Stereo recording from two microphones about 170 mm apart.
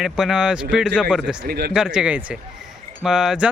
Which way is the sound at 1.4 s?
65° right (ahead or behind).